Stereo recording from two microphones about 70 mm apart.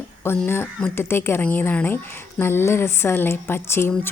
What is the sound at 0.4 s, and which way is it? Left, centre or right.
A woman's voice, left.